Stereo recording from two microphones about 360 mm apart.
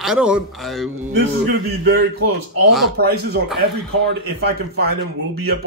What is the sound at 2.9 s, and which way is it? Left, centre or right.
A man's voice, right.